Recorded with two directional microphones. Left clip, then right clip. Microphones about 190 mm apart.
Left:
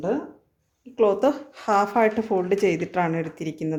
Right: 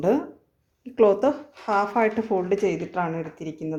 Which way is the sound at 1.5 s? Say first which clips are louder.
Left 2 dB; 15° left (ahead or behind).